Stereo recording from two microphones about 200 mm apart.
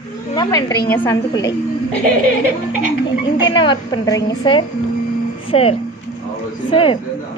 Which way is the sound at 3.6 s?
20° left (ahead or behind).